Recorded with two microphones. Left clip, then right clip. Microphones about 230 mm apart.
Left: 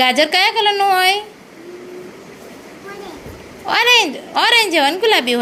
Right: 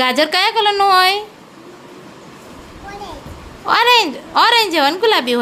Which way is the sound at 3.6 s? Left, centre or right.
Centre.